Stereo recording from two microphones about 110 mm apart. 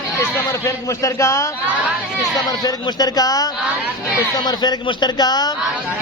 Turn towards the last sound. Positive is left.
turn(degrees=40)  # may be behind; listen again after turning